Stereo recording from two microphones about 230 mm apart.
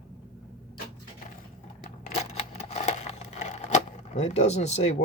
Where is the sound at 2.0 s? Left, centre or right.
Left.